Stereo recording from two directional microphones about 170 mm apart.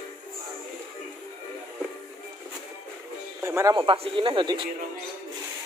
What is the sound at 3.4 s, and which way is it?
Music, 15° right (ahead or behind).